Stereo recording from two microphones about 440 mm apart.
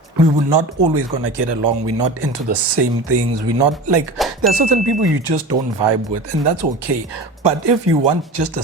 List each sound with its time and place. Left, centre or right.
0.2 s a man's voice: right